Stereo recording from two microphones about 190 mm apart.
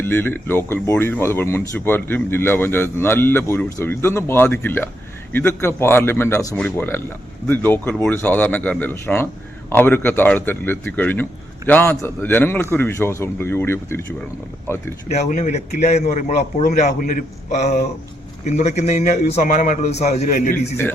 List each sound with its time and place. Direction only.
0.0 s speech: 10° left (ahead or behind)
15.1 s a man's voice: 40° left (ahead or behind)